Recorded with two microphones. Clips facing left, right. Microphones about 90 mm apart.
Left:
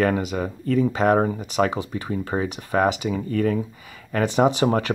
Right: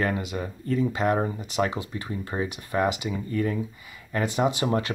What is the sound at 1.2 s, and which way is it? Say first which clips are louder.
Speech: left 6 dB; 50° left (ahead or behind).